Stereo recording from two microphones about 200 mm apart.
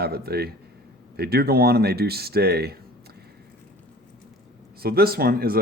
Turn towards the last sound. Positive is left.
turn(degrees=-50)  # may be behind; listen again after turning